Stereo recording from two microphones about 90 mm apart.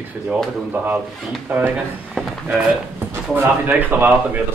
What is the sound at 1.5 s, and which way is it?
Speech, 20° right (ahead or behind).